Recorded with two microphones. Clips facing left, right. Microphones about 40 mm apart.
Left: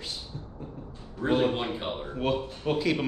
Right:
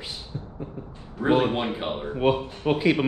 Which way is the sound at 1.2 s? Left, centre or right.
Right.